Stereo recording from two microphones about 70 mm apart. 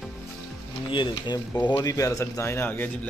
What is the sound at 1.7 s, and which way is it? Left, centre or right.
Speech, left.